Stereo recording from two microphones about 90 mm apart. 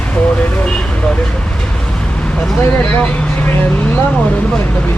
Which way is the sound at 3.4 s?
20° left (ahead or behind).